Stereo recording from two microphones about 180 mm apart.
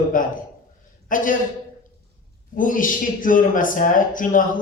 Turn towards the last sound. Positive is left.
turn(degrees=50)  # may be behind; listen again after turning